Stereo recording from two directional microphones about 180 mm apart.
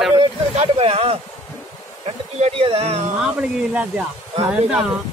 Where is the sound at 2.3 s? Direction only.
35° right (ahead or behind).